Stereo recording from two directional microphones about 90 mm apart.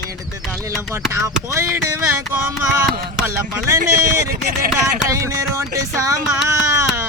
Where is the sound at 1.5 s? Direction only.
30° right (ahead or behind).